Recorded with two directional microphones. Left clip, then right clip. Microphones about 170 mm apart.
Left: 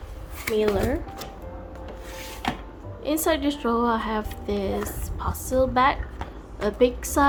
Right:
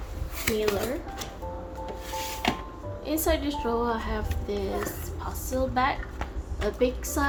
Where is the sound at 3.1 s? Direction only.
50° left (ahead or behind).